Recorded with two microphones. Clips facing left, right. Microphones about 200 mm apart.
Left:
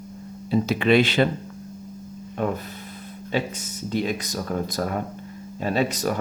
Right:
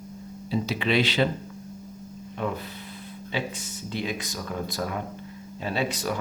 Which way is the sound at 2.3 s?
45° left (ahead or behind).